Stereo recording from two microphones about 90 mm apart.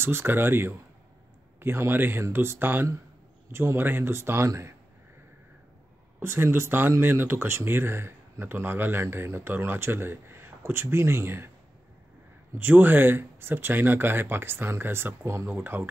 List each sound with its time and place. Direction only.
0.0 s speech: 25° right (ahead or behind)
6.1 s speech: 30° right (ahead or behind)
12.5 s speech: 25° right (ahead or behind)